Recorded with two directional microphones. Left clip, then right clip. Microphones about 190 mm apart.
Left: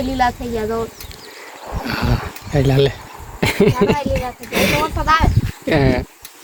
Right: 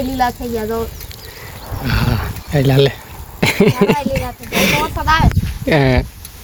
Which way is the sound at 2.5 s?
15° right (ahead or behind).